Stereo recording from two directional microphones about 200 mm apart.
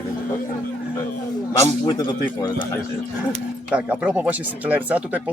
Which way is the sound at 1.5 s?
20° left (ahead or behind).